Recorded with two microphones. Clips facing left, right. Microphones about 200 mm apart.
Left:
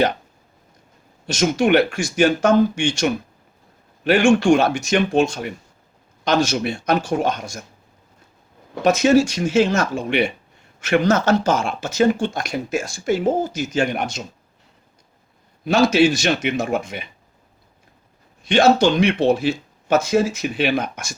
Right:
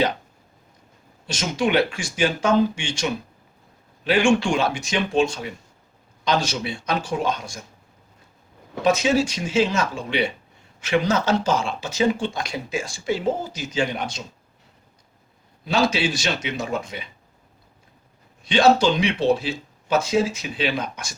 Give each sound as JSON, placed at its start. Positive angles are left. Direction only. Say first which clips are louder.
{"t": 1.4, "sound": "speech", "louder": "left 5 dB", "side_deg": 45}
{"t": 4.2, "sound": "speech", "louder": "left 4 dB", "side_deg": 45}
{"t": 8.9, "sound": "speech", "louder": "left 5 dB", "side_deg": 45}
{"t": 10.8, "sound": "speech", "louder": "left 4 dB", "side_deg": 65}
{"t": 11.1, "sound": "speech", "louder": "left 3 dB", "side_deg": 45}
{"t": 15.6, "sound": "speech", "louder": "left 6 dB", "side_deg": 50}
{"t": 16.0, "sound": "speech", "louder": "left 6 dB", "side_deg": 60}
{"t": 18.9, "sound": "speech", "louder": "left 3 dB", "side_deg": 50}